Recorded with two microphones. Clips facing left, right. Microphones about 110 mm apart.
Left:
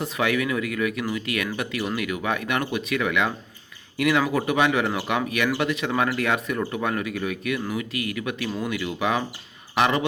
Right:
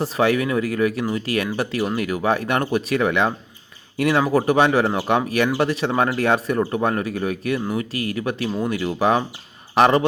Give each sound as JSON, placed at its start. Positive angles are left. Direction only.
{"t": 0.0, "sound": "speech", "side_deg": -35}